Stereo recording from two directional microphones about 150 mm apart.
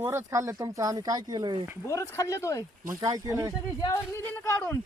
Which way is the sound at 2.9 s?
25° right (ahead or behind).